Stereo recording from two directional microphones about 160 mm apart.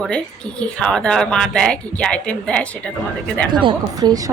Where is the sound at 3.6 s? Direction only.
25° right (ahead or behind).